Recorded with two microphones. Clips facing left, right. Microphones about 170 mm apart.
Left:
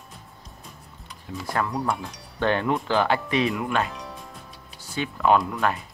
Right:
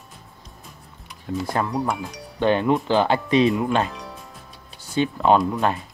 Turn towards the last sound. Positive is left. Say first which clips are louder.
# right 3 dB
turn(degrees=-25)  # may be behind; listen again after turning